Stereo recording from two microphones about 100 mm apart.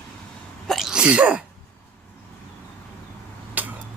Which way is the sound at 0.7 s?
Centre (ahead or behind).